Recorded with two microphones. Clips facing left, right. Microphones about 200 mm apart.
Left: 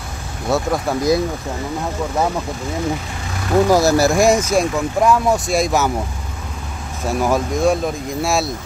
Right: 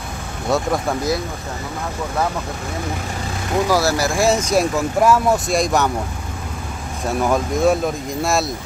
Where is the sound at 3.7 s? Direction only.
20° left (ahead or behind).